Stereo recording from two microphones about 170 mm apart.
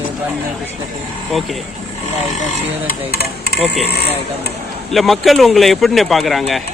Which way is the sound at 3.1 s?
70° left (ahead or behind).